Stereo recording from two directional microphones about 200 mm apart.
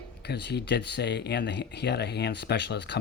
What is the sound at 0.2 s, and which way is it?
Speech, 55° left (ahead or behind).